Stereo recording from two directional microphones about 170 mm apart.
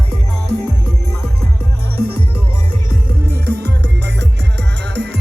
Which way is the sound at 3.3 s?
75° right (ahead or behind).